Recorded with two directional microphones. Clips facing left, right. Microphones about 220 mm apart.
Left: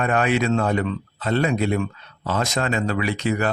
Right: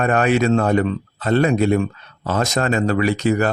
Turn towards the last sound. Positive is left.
turn(degrees=-40)  # may be behind; listen again after turning